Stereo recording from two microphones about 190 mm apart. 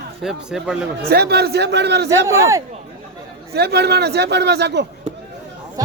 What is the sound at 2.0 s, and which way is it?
Speech, 15° right (ahead or behind).